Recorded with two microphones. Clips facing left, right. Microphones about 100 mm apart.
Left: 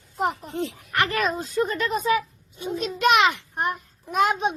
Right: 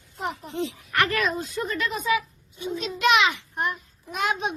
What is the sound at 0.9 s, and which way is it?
A child's voice, 25° left (ahead or behind).